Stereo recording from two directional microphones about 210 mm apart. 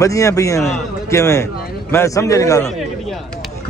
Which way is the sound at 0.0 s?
15° left (ahead or behind).